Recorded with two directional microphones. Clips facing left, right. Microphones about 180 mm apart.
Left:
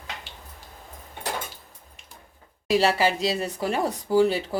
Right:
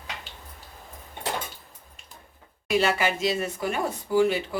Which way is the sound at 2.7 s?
30° left (ahead or behind).